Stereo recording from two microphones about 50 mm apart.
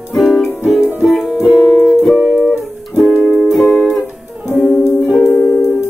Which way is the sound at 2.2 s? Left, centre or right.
Right.